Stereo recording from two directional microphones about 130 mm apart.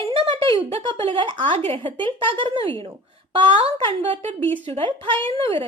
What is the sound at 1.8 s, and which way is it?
Speech, 40° right (ahead or behind).